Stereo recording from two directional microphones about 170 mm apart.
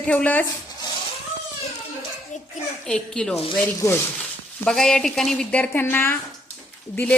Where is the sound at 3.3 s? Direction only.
35° left (ahead or behind).